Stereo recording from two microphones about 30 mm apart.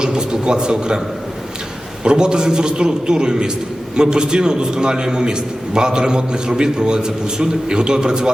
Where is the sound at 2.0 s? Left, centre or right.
Right.